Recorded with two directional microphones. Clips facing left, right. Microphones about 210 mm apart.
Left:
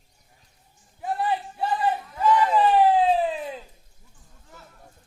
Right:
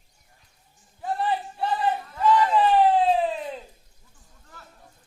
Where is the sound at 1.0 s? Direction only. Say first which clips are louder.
Even; 10° left (ahead or behind).